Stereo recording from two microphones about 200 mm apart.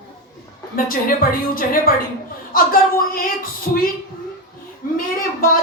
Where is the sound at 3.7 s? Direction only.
45° left (ahead or behind).